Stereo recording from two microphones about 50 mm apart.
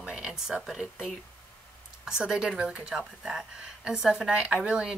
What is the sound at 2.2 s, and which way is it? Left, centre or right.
Speech, centre.